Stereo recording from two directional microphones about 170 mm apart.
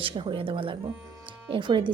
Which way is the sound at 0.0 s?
30° right (ahead or behind).